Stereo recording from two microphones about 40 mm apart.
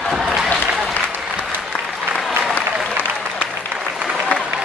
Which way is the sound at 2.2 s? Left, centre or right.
Centre.